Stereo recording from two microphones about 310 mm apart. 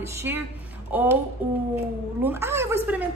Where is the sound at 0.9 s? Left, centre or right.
Centre.